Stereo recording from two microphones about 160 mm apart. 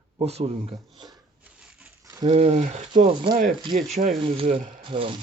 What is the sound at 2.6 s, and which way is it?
Speech, 50° right (ahead or behind).